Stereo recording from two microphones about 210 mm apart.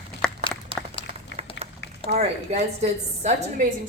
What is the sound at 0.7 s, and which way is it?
Applause, 25° right (ahead or behind).